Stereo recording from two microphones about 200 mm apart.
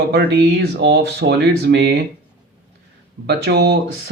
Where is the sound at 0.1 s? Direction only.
55° right (ahead or behind).